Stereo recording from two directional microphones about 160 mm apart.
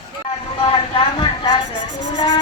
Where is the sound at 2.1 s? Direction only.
25° left (ahead or behind).